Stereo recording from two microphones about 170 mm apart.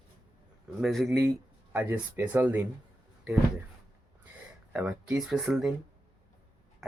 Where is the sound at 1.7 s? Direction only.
10° right (ahead or behind).